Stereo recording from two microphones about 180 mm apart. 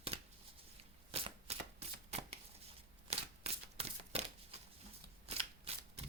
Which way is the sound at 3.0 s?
35° right (ahead or behind).